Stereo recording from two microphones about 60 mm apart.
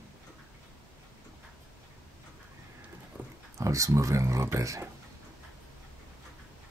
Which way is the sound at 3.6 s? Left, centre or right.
Right.